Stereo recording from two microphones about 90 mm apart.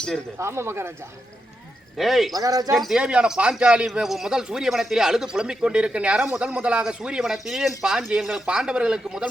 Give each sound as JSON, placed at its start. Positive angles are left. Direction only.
{"t": 0.3, "sound": "speech", "side_deg": -30}
{"t": 2.0, "sound": "speech", "side_deg": 0}
{"t": 2.3, "sound": "speech", "side_deg": -40}
{"t": 2.7, "sound": "speech", "side_deg": -5}